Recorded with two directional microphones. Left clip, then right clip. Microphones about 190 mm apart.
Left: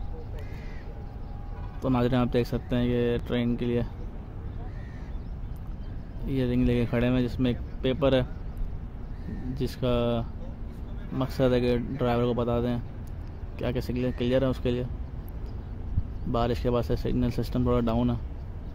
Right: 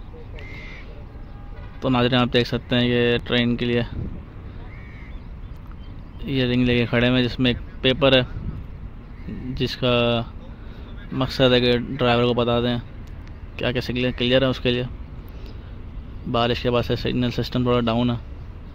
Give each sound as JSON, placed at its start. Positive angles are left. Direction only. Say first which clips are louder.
{"t": 1.8, "sound": "speech", "louder": "right 7 dB", "side_deg": 0}
{"t": 6.2, "sound": "speech", "louder": "right 6 dB", "side_deg": 0}
{"t": 9.6, "sound": "speech", "louder": "right 7 dB", "side_deg": 0}
{"t": 16.3, "sound": "speech", "louder": "right 6 dB", "side_deg": 0}